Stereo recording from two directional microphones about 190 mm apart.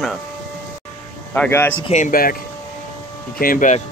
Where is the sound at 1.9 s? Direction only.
45° left (ahead or behind).